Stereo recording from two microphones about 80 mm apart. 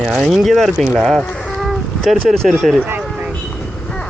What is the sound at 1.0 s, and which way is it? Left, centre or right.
Livestock, centre.